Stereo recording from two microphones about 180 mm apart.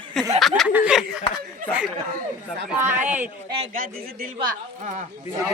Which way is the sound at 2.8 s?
10° right (ahead or behind).